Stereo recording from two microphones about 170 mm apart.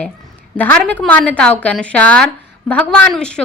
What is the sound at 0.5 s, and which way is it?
A woman's voice, 10° left (ahead or behind).